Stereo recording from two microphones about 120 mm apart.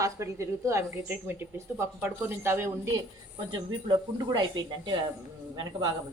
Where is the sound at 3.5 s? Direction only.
40° right (ahead or behind).